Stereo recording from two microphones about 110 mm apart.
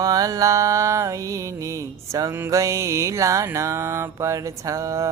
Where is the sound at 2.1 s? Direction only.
30° right (ahead or behind).